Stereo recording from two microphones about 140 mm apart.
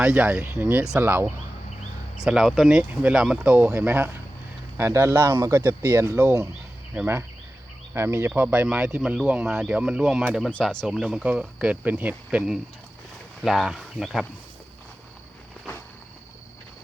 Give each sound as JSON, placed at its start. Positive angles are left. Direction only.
{"t": 0.0, "sound": "speech", "side_deg": -10}
{"t": 2.1, "sound": "speech", "side_deg": -5}
{"t": 10.8, "sound": "speech", "side_deg": -5}